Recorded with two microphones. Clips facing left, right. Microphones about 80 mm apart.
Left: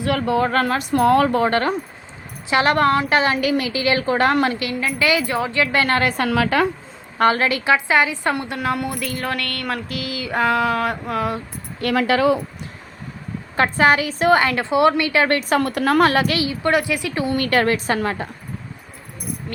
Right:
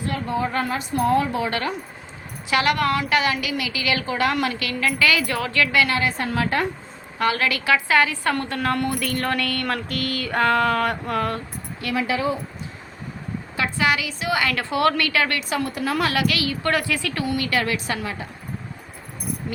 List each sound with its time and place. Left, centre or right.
0.0 s a woman's voice: left
2.5 s a woman's voice: left
4.6 s a woman's voice: left
5.7 s a woman's voice: left
6.0 s a woman's voice: left
7.2 s a woman's voice: left; by 11.3 s centre
11.8 s speech: left
13.6 s a woman's voice: left
14.4 s a woman's voice: left
15.4 s a woman's voice: left
16.2 s a woman's voice: left
16.5 s a woman's voice: centre
17.3 s a woman's voice: left
19.5 s speech: centre